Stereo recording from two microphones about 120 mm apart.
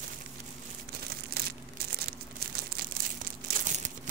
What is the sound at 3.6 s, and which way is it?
Crumpling, 90° right.